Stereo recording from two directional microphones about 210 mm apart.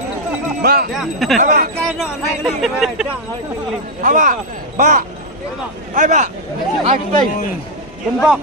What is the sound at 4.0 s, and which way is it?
Speech, 40° right (ahead or behind).